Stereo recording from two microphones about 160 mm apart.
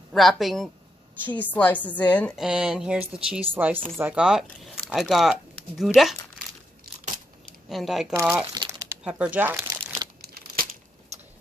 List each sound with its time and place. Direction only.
0.1 s speech: centre (ahead or behind)
1.2 s a woman's voice: 10° left (ahead or behind)
2.3 s speech: 5° right (ahead or behind)
7.7 s speech: centre (ahead or behind)
8.2 s speech: 15° right (ahead or behind)
10.2 s a sound: 70° right (ahead or behind)